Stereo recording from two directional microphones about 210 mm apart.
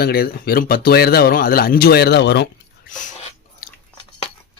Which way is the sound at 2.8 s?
35° left (ahead or behind).